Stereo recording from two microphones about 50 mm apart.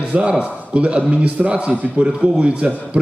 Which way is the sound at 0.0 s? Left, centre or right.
Right.